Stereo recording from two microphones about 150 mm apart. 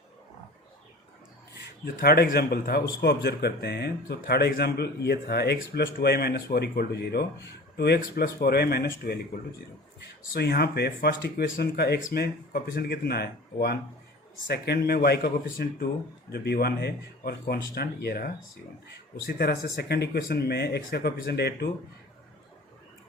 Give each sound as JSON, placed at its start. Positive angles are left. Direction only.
{"t": 2.0, "sound": "speech", "side_deg": 90}
{"t": 10.3, "sound": "speech", "side_deg": 90}